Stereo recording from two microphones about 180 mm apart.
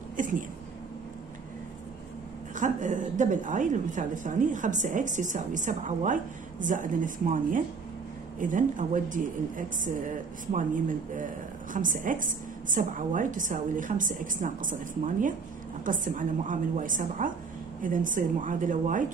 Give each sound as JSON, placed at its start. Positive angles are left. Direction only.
{"t": 0.2, "sound": "speech", "side_deg": -45}
{"t": 2.5, "sound": "a woman's voice", "side_deg": -45}